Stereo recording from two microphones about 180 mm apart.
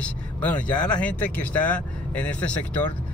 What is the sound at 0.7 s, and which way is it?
Speech, 25° left (ahead or behind).